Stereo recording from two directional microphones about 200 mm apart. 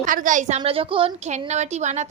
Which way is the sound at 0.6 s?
25° right (ahead or behind).